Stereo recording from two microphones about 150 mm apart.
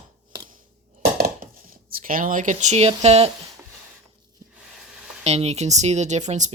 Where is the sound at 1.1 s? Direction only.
75° right (ahead or behind); by 3.2 s 45° right (ahead or behind).